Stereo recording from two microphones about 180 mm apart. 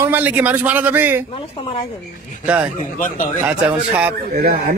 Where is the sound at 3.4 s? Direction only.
5° right (ahead or behind).